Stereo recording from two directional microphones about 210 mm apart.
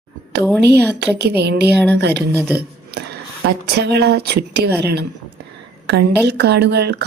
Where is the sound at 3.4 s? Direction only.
50° right (ahead or behind).